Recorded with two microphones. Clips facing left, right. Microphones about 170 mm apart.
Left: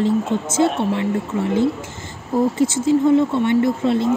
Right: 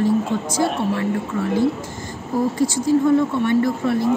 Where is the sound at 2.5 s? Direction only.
25° left (ahead or behind).